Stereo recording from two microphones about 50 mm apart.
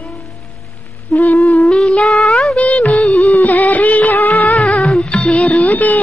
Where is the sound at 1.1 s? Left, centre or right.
Left.